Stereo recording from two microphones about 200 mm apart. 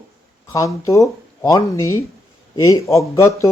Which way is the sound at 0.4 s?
15° left (ahead or behind).